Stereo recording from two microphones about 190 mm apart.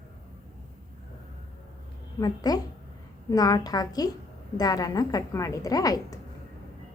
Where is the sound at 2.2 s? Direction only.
20° left (ahead or behind).